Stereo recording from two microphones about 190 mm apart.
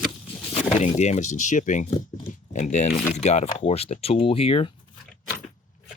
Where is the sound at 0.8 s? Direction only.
40° left (ahead or behind).